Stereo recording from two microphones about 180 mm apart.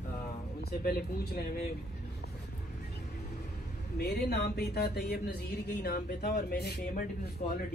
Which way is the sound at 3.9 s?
65° left (ahead or behind).